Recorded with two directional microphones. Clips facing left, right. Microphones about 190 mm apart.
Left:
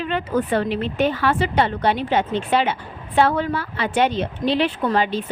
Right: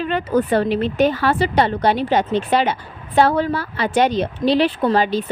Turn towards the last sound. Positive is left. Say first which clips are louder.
# right 3 dB
turn(degrees=-35)  # may be behind; listen again after turning